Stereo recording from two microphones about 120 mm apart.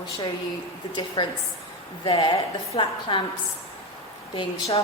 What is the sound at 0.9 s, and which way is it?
A woman's voice, 40° left (ahead or behind).